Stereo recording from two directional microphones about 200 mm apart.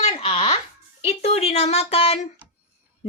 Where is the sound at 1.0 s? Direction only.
30° left (ahead or behind).